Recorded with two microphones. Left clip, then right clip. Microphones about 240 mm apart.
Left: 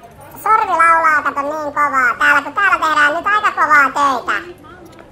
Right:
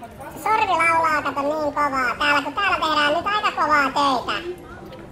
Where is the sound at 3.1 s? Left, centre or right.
Left.